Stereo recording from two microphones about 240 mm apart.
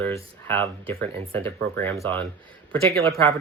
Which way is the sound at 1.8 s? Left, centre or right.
Centre.